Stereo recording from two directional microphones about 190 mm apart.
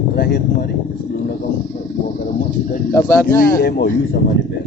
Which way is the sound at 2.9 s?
10° left (ahead or behind).